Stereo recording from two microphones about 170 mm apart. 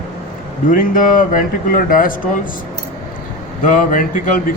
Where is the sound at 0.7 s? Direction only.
50° left (ahead or behind).